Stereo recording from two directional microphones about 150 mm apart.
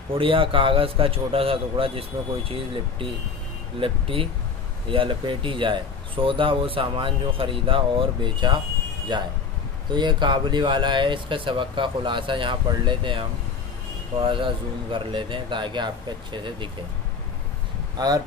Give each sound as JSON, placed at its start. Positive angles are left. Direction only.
{"t": 0.1, "sound": "speech", "side_deg": -35}
{"t": 17.9, "sound": "speech", "side_deg": -25}